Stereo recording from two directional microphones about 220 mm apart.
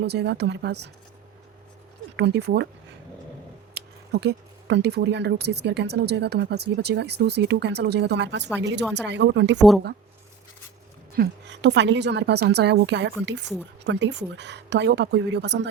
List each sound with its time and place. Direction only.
0.0 s speech: 50° right (ahead or behind)
2.1 s speech: 50° right (ahead or behind)
3.8 s speech: 50° right (ahead or behind)
9.6 s speech: centre (ahead or behind)
11.1 s speech: 50° right (ahead or behind)